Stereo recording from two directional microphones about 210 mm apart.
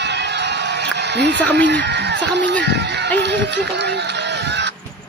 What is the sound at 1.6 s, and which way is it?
Speech, 55° right (ahead or behind).